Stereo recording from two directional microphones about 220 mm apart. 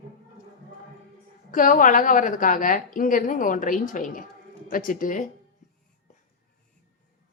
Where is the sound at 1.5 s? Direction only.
40° left (ahead or behind).